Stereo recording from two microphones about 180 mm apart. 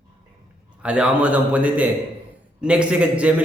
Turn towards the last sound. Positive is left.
turn(degrees=-5)  # may be behind; listen again after turning